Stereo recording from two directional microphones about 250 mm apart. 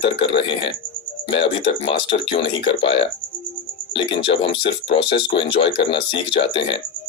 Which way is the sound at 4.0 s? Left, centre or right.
Left.